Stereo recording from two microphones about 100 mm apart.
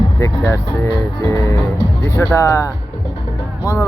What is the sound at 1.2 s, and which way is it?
Speech, 20° left (ahead or behind).